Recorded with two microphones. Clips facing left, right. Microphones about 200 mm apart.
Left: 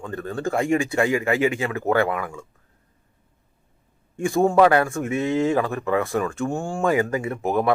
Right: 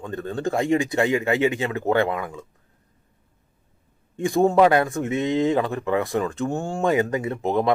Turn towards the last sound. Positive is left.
turn(degrees=-20)  # may be behind; listen again after turning